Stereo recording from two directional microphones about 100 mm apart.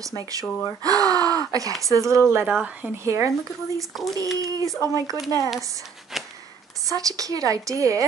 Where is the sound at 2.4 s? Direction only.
10° right (ahead or behind); by 3.3 s 30° right (ahead or behind).